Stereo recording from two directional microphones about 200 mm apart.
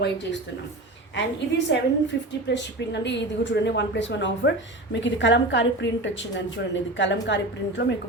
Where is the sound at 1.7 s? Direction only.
60° left (ahead or behind).